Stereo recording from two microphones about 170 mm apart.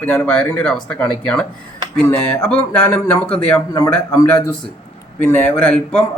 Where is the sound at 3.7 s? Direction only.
20° left (ahead or behind).